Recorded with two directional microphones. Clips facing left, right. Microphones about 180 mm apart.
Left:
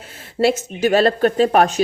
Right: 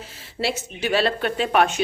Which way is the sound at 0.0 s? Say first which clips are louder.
Left 9 dB; 50° left (ahead or behind).